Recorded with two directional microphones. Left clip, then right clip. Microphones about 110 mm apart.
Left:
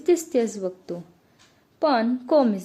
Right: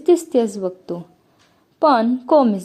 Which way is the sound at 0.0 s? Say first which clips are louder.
Right 5 dB; 20° right (ahead or behind).